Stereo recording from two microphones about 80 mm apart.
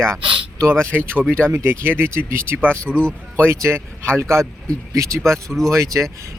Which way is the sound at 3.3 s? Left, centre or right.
Right.